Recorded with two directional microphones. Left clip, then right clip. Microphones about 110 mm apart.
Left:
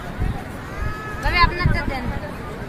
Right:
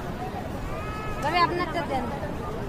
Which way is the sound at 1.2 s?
30° right (ahead or behind).